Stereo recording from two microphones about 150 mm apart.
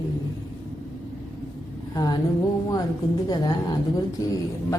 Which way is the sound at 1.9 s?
25° left (ahead or behind).